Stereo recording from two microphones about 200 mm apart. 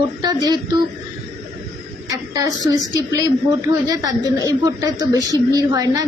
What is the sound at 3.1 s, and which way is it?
A woman's voice, 15° right (ahead or behind).